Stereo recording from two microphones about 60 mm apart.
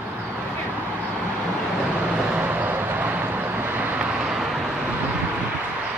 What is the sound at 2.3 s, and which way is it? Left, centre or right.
Vehicle, right.